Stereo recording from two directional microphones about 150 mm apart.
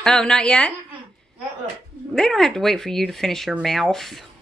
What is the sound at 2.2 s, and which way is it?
Speech, 5° left (ahead or behind).